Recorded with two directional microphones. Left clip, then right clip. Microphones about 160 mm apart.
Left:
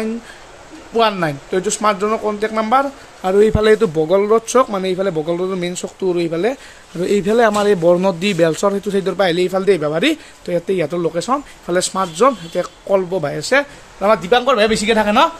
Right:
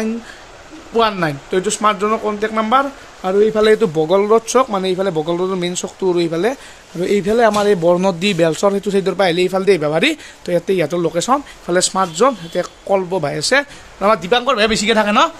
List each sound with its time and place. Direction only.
0.9 s speech: centre (ahead or behind)
3.3 s a man's voice: 15° left (ahead or behind)
3.6 s speech: centre (ahead or behind)